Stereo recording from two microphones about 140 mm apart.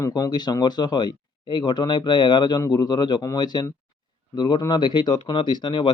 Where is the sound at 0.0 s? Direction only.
30° left (ahead or behind).